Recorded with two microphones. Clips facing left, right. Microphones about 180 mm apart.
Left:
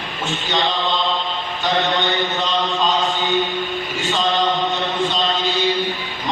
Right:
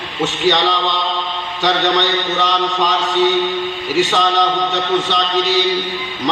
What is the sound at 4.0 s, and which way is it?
Chant, 80° right.